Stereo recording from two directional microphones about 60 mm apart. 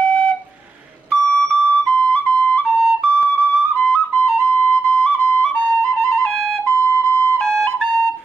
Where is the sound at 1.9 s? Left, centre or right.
Centre.